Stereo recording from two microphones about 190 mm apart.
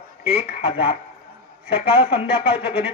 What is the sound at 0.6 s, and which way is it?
A man's voice, 30° left (ahead or behind).